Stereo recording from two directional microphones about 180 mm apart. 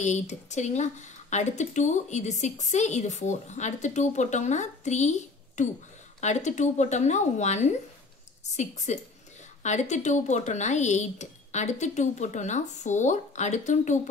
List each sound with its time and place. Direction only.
0.0 s speech: 40° left (ahead or behind)